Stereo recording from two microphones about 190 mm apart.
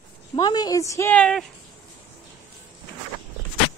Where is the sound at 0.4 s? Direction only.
20° left (ahead or behind).